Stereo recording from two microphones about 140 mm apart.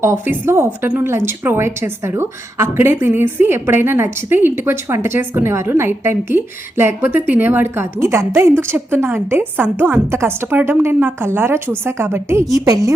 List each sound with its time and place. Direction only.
0.0 s a woman's voice: 20° right (ahead or behind)